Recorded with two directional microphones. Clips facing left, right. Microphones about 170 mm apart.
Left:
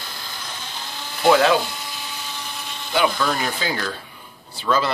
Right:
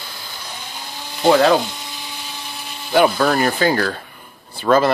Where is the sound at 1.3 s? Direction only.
40° right (ahead or behind).